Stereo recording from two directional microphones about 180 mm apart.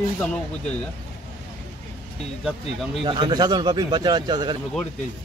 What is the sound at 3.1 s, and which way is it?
Speech, 25° right (ahead or behind).